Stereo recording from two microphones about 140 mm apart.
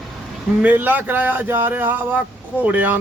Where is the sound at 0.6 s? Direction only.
10° right (ahead or behind).